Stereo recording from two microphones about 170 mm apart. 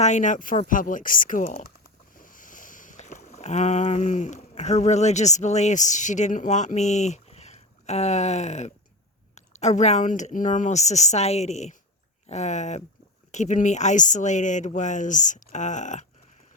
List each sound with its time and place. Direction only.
0.0 s speech: 45° left (ahead or behind)
2.1 s boat: 50° left (ahead or behind)
9.3 s speech: 40° left (ahead or behind)